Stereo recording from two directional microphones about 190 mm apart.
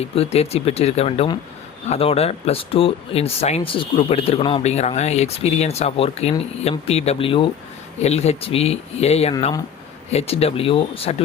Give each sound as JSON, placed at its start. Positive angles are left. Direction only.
{"t": 0.0, "sound": "speech", "side_deg": 35}